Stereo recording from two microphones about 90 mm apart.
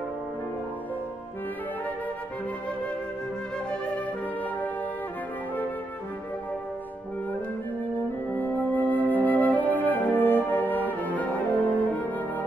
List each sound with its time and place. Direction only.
8.3 s music: 20° left (ahead or behind)
9.8 s brass instrument: 20° left (ahead or behind)